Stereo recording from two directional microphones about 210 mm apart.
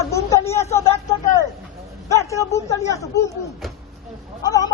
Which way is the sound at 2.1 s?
15° left (ahead or behind).